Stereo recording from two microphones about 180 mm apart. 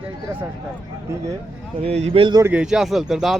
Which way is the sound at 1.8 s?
35° right (ahead or behind).